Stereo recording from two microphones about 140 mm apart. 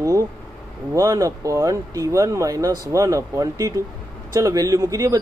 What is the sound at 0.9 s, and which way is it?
Speech, 25° right (ahead or behind).